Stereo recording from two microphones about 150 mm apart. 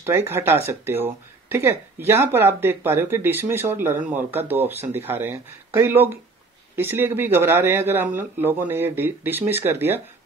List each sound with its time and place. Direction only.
0.0 s speech: 15° right (ahead or behind)